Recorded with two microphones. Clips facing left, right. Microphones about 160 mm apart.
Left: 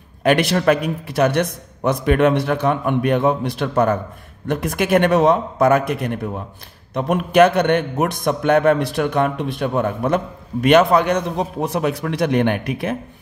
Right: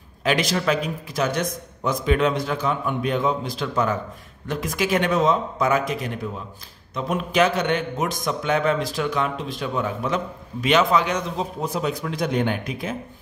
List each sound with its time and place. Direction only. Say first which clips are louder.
0.2 s a man's voice: left 6 dB; 60° left (ahead or behind)